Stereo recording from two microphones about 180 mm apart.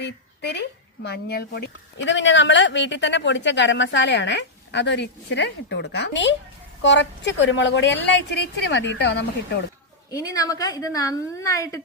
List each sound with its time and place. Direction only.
0.0 s a woman's voice: 70° left (ahead or behind)
10.3 s a woman's voice: 20° left (ahead or behind)